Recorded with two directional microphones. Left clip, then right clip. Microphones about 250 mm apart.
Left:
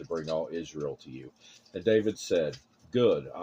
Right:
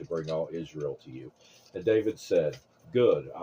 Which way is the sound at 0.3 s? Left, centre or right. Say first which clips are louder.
Even; left.